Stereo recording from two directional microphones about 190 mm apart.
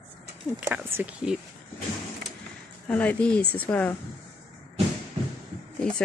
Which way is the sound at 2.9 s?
5° left (ahead or behind).